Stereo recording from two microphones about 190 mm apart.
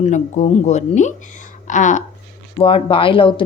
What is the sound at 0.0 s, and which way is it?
Speech, 40° left (ahead or behind).